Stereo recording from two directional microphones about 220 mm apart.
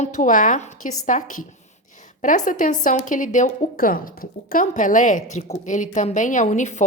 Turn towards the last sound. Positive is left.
turn(degrees=30)  # may be behind; listen again after turning